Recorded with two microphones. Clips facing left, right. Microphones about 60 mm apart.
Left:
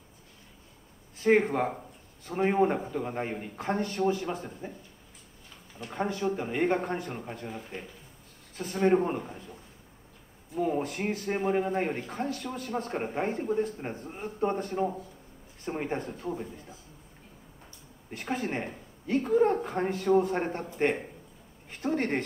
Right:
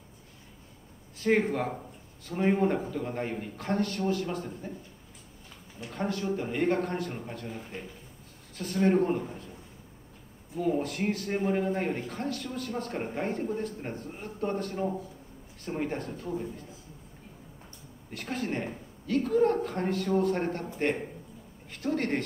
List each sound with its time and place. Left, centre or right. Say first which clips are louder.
1.3 s speech: left 2 dB; centre
5.9 s speech: left 1 dB; centre
10.6 s speech: even; centre
18.2 s speech: left 1 dB; centre
19.2 s speech: left 1 dB; centre
19.6 s speech: left 1 dB; centre
20.8 s speech: left 2 dB; left
21.6 s a sound: left 1 dB; left